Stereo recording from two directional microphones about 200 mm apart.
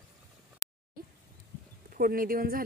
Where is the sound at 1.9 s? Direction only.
45° right (ahead or behind).